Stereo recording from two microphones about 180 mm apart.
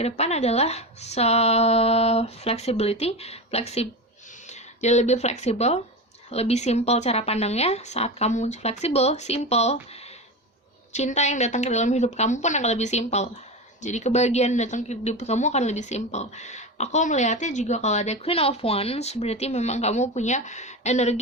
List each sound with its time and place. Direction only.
0.0 s speech: 35° left (ahead or behind)